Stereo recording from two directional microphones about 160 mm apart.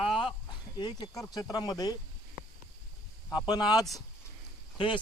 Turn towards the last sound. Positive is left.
turn(degrees=30)  # may be behind; listen again after turning